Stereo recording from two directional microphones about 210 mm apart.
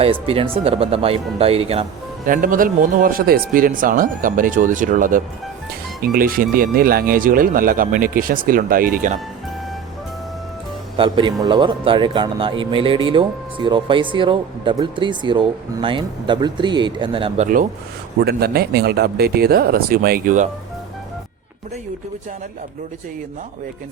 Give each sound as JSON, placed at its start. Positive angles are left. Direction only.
{"t": 0.0, "sound": "a man's voice", "side_deg": -25}
{"t": 2.2, "sound": "speech", "side_deg": -40}
{"t": 10.9, "sound": "a man's voice", "side_deg": -25}
{"t": 18.2, "sound": "speech", "side_deg": -50}